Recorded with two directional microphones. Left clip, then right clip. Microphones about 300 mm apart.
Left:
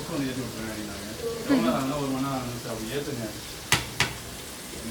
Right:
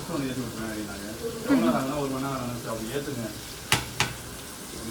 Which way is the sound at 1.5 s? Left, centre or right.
Centre.